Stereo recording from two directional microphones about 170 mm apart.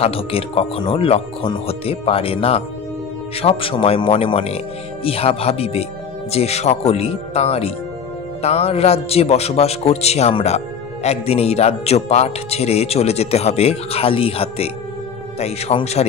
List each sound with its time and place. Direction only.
0.0 s a man's voice: 35° left (ahead or behind)